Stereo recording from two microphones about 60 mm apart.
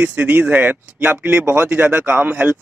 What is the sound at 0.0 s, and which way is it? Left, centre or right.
Speech, right.